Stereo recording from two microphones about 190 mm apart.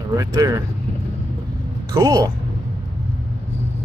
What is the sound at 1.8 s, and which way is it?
Speech, 15° right (ahead or behind).